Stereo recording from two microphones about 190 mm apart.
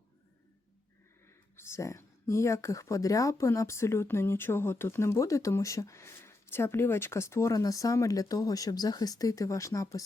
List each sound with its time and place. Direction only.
1.5 s speech: 15° left (ahead or behind)